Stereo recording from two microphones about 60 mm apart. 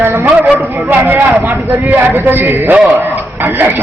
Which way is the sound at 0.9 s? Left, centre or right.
Right.